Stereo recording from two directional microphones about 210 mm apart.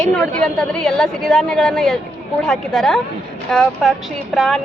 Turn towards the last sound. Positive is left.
turn(degrees=0)  # may be behind; listen again after turning